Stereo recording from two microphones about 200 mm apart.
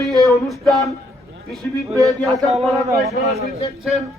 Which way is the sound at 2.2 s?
Centre (ahead or behind).